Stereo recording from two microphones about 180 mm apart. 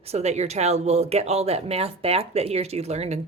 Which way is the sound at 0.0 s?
35° right (ahead or behind).